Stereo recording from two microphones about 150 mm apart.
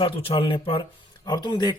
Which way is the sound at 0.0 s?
35° left (ahead or behind).